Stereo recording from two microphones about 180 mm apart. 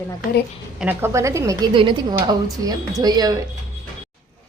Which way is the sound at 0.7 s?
10° right (ahead or behind).